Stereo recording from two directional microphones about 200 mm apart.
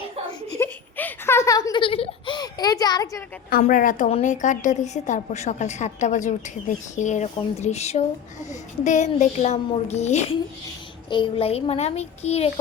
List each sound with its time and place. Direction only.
0.6 s giggle: 10° left (ahead or behind)
3.5 s a woman's voice: 45° left (ahead or behind)